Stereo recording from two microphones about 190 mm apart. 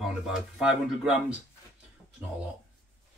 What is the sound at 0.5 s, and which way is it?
Speech, 5° right (ahead or behind).